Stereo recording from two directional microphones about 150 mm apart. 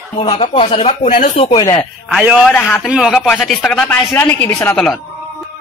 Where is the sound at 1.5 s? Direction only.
20° left (ahead or behind).